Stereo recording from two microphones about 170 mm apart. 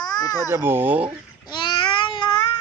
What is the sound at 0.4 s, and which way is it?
Speech, 15° right (ahead or behind).